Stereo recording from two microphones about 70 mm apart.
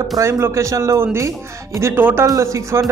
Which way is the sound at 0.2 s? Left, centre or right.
Right.